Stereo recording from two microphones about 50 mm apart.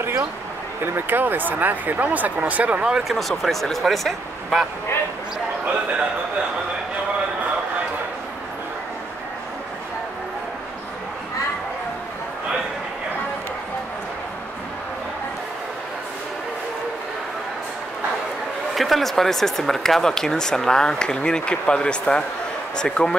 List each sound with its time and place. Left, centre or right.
0.9 s speech: right
2.8 s speech: centre
18.8 s speech: centre